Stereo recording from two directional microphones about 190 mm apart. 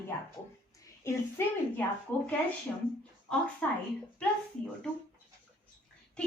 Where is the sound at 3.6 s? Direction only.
5° left (ahead or behind).